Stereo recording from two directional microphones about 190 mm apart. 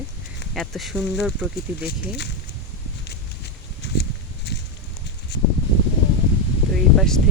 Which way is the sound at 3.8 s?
65° left (ahead or behind).